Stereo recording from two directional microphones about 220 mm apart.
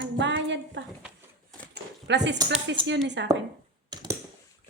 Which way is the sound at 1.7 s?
50° right (ahead or behind).